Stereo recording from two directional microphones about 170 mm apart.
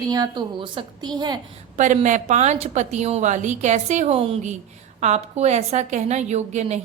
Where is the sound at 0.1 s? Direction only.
25° right (ahead or behind).